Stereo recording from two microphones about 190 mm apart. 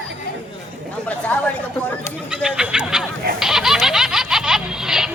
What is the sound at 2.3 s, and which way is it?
Fowl, 5° right (ahead or behind).